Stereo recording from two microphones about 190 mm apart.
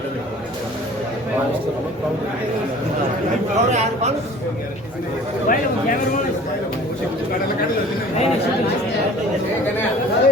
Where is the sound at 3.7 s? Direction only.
35° right (ahead or behind).